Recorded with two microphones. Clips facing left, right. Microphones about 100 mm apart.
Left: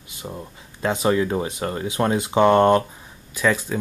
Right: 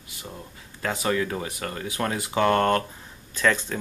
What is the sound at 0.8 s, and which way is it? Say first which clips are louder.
Speech: left 5 dB; 25° left (ahead or behind).